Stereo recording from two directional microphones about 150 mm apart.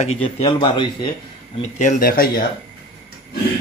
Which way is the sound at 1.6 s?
55° left (ahead or behind).